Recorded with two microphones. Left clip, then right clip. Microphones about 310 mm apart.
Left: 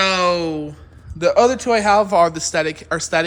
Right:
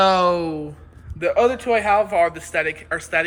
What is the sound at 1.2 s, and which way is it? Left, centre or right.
Speech, left.